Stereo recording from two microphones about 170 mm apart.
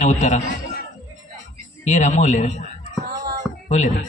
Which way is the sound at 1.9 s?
45° left (ahead or behind).